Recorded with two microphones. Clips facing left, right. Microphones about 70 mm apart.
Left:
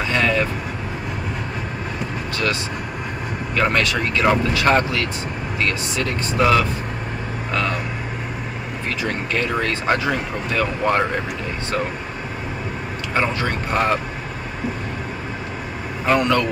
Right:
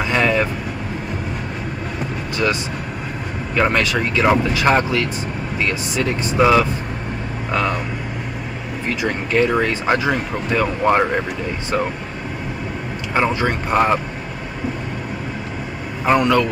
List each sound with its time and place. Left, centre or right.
0.0 s vehicle: centre
3.5 s speech: centre
8.8 s speech: centre
13.1 s speech: centre
16.2 s a man's voice: centre